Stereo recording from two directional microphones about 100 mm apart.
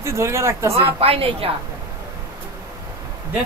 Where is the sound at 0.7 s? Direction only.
75° right (ahead or behind).